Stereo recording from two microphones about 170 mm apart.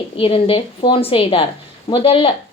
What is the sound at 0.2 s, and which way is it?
Speech, 35° left (ahead or behind).